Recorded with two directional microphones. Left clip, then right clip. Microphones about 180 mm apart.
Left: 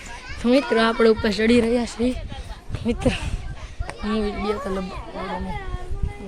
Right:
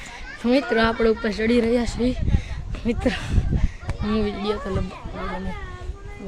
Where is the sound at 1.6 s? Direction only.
5° right (ahead or behind).